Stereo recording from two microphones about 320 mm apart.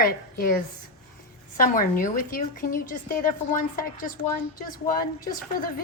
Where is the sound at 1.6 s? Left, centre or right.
Left.